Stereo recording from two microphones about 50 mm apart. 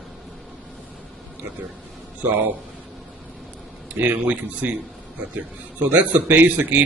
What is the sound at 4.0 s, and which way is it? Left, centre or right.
Speech, right.